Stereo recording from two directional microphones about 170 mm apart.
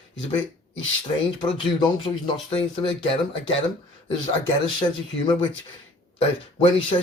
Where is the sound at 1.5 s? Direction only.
25° left (ahead or behind).